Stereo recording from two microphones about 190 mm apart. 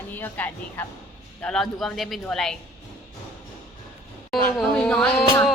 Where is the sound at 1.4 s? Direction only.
5° left (ahead or behind).